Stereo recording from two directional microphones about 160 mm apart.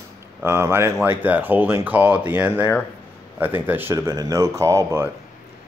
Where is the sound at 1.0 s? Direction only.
10° right (ahead or behind).